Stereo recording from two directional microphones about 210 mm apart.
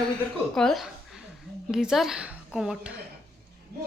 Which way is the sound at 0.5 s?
Centre (ahead or behind).